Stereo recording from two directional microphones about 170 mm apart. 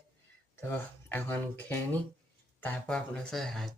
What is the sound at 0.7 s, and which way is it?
Speech, 10° left (ahead or behind).